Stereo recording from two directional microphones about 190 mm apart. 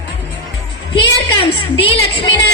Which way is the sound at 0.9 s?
25° left (ahead or behind).